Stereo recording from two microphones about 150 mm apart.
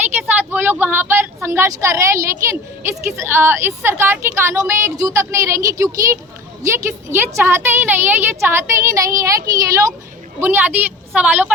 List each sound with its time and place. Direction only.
0.5 s a woman's voice: 15° right (ahead or behind)